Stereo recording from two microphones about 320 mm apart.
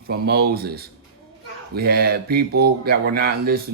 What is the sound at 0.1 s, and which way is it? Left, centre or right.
Speech, right.